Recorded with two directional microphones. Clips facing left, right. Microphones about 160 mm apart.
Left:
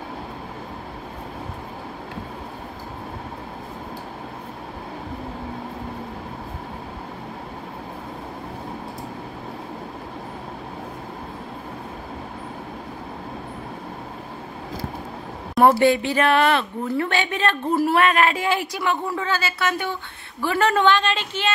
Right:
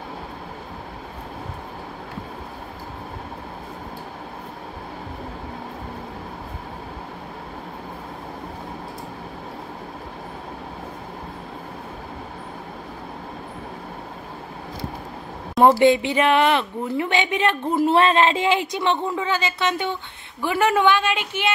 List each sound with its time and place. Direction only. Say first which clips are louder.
15.8 s speech: right 1 dB; 20° right (ahead or behind)